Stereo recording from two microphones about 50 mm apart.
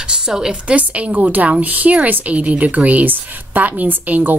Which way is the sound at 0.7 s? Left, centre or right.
Right.